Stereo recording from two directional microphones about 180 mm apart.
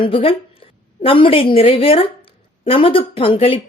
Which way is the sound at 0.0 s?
30° left (ahead or behind).